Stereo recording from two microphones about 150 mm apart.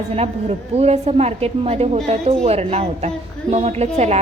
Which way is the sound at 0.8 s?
45° right (ahead or behind).